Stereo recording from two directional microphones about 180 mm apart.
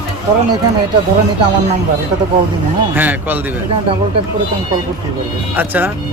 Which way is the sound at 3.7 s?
30° right (ahead or behind).